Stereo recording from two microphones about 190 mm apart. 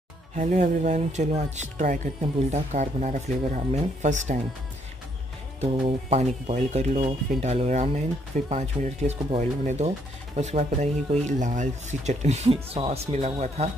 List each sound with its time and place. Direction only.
0.4 s speech: 40° right (ahead or behind)
5.6 s speech: 35° right (ahead or behind)